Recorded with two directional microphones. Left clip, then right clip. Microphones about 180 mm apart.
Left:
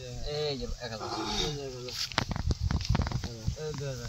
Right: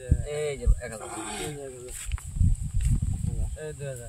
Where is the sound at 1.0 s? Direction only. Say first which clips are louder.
Left 5 dB; 10° right (ahead or behind).